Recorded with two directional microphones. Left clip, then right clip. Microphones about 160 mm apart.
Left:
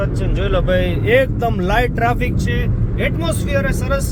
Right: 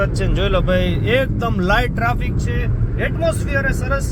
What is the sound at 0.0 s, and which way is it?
Speech, 10° right (ahead or behind).